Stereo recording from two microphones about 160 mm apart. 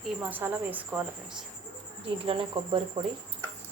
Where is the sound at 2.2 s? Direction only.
35° right (ahead or behind).